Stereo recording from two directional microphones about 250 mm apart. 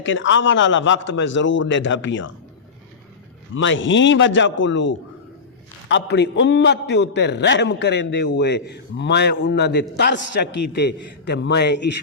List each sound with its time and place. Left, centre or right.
0.0 s a man's voice: left
3.5 s a man's voice: left